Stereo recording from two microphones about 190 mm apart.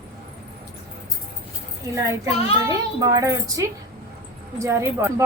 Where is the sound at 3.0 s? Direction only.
20° right (ahead or behind).